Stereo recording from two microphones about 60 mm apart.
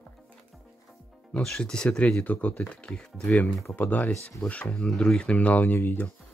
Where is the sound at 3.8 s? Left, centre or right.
Left.